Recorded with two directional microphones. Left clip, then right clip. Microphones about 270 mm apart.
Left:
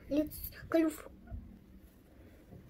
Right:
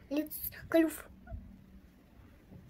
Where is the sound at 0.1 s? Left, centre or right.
Right.